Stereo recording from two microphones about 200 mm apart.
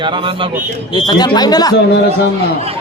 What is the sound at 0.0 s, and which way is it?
Speech, 25° right (ahead or behind).